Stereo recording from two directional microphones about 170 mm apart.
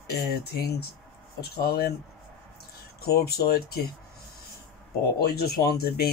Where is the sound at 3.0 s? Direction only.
65° left (ahead or behind).